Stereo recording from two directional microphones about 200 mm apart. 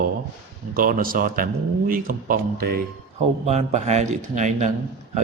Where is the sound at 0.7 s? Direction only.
45° right (ahead or behind).